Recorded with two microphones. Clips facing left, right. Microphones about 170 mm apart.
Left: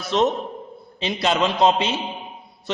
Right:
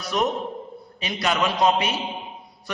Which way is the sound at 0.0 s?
25° left (ahead or behind).